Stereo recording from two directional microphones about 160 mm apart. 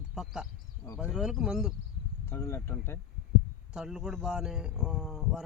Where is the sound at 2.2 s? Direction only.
15° left (ahead or behind).